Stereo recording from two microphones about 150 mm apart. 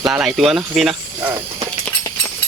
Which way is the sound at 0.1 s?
5° right (ahead or behind).